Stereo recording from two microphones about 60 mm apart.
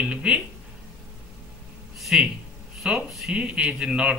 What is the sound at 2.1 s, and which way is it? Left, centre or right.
A man's voice, centre.